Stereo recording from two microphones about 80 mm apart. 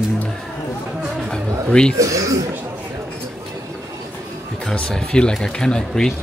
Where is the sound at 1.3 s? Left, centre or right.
Centre.